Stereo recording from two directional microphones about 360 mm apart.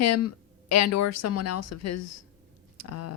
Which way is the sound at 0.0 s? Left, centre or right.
Left.